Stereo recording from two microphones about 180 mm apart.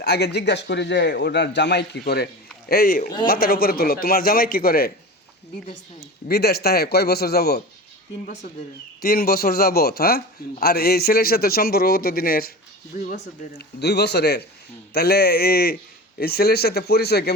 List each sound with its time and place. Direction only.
0.0 s a man's voice: 65° left (ahead or behind)
2.0 s a man's voice: 60° left (ahead or behind)
13.6 s a man's voice: 65° left (ahead or behind)